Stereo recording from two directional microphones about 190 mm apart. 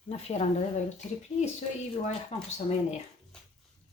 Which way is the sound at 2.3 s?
30° left (ahead or behind).